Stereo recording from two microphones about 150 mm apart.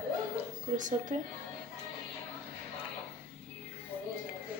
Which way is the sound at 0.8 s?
55° right (ahead or behind).